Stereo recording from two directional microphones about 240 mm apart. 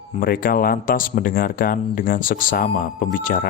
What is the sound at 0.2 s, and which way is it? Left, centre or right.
Speech, left.